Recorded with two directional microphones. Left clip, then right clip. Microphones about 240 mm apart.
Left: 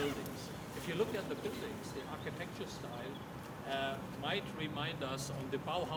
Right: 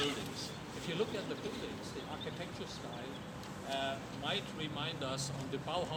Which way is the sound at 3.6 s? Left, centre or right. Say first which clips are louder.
Even; centre.